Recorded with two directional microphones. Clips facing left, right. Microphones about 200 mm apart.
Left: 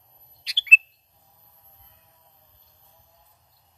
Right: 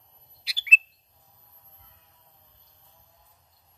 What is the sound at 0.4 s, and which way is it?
Bird, 5° right (ahead or behind).